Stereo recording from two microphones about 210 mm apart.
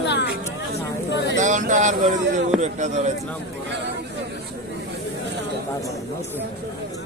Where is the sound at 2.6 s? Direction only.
35° right (ahead or behind).